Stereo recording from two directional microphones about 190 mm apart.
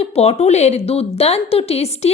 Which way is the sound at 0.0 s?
30° left (ahead or behind).